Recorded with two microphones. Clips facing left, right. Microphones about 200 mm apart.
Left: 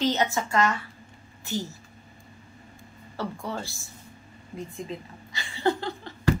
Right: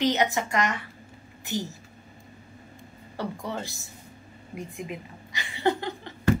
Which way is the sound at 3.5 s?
20° right (ahead or behind).